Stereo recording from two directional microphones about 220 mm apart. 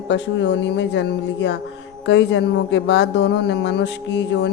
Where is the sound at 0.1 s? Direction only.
55° left (ahead or behind).